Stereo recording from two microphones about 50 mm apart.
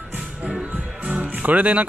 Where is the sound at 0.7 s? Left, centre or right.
Right.